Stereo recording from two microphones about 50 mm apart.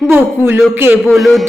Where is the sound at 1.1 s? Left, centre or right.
Centre.